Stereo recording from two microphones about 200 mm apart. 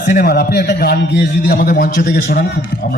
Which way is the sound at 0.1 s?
50° left (ahead or behind).